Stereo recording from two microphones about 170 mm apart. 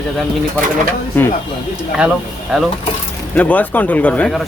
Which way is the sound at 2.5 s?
5° right (ahead or behind).